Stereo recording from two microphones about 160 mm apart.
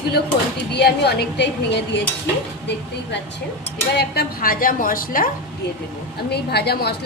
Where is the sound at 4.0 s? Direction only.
75° left (ahead or behind).